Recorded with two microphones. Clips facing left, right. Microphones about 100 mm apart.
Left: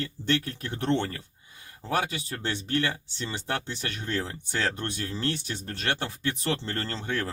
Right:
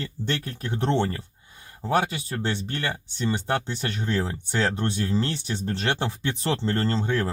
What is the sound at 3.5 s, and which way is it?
Speech, 20° right (ahead or behind).